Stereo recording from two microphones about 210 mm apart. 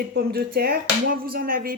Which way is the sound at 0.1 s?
50° right (ahead or behind).